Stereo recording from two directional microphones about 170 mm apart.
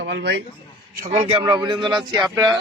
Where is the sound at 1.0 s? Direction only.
40° right (ahead or behind).